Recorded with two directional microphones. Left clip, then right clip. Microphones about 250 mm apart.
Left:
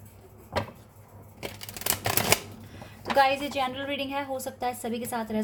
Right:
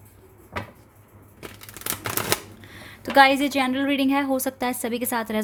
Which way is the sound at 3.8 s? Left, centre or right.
Right.